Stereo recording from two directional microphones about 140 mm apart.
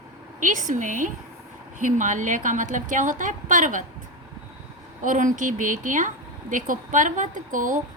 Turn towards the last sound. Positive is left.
turn(degrees=-70)  # may be behind; listen again after turning